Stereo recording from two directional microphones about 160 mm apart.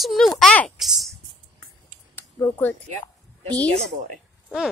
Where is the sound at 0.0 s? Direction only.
Centre (ahead or behind).